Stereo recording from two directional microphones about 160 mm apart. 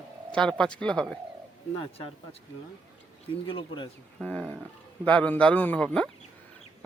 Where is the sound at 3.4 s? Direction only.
30° left (ahead or behind).